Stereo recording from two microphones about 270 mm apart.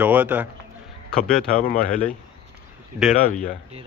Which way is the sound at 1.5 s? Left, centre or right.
Left.